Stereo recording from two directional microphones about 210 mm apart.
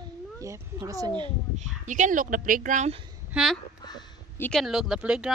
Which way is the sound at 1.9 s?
35° right (ahead or behind).